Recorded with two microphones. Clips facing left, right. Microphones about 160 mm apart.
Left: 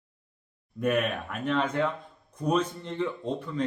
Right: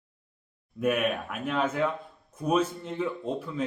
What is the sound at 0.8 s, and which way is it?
Speech, 5° right (ahead or behind).